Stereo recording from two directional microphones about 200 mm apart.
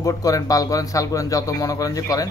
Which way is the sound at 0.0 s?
15° left (ahead or behind).